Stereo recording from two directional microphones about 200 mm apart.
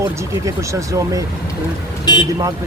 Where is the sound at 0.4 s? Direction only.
15° right (ahead or behind).